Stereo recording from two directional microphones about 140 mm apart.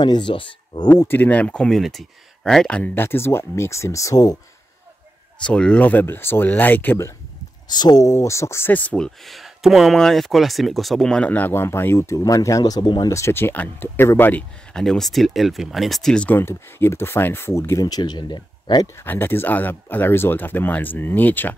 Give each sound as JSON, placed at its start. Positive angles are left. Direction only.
{"t": 0.0, "sound": "speech", "side_deg": 35}
{"t": 1.0, "sound": "speech", "side_deg": 15}
{"t": 5.4, "sound": "speech", "side_deg": 10}
{"t": 7.6, "sound": "speech", "side_deg": 30}
{"t": 13.1, "sound": "speech", "side_deg": 20}
{"t": 18.9, "sound": "speech", "side_deg": 15}